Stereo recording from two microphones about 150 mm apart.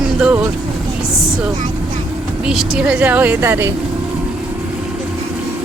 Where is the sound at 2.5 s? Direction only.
5° right (ahead or behind).